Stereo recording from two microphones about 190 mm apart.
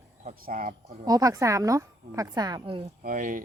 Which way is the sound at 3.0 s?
45° right (ahead or behind).